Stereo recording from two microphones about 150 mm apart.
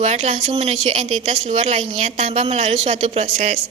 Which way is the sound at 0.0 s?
50° right (ahead or behind).